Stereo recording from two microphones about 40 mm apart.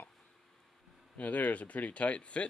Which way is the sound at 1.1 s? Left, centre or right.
Left.